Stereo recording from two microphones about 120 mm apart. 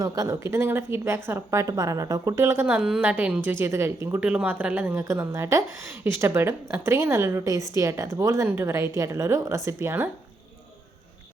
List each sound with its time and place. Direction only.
0.0 s a woman's voice: 30° right (ahead or behind)
2.6 s a woman's voice: 5° right (ahead or behind)
4.2 s a woman's voice: 10° right (ahead or behind)